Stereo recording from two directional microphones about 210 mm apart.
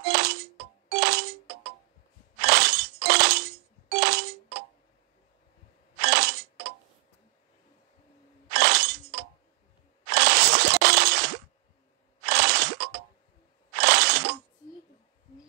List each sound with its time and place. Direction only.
0.0 s music: 45° right (ahead or behind)
2.4 s breaking: 45° right (ahead or behind)
3.9 s music: 45° right (ahead or behind)
5.9 s single-lens reflex camera: 45° right (ahead or behind)
8.5 s breaking: 50° right (ahead or behind)
10.0 s a sound: 45° right (ahead or behind)
13.7 s breaking: 50° right (ahead or behind)